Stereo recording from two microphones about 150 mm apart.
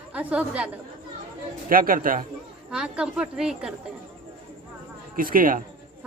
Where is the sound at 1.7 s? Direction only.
70° right (ahead or behind).